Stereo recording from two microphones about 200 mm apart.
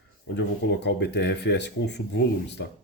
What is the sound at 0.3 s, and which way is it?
Speech, 60° left (ahead or behind).